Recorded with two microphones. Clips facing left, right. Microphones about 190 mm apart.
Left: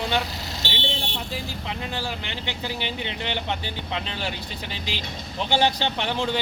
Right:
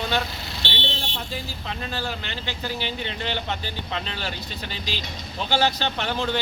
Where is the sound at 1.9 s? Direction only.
15° left (ahead or behind).